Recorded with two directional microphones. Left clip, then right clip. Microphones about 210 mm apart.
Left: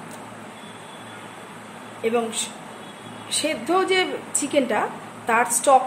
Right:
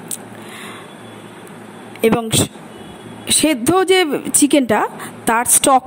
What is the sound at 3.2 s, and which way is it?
A woman's voice, 50° right (ahead or behind).